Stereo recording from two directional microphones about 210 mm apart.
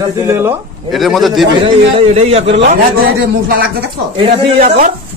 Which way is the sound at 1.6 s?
30° right (ahead or behind).